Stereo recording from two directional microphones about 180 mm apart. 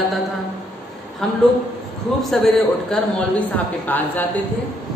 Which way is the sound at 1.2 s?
5° left (ahead or behind).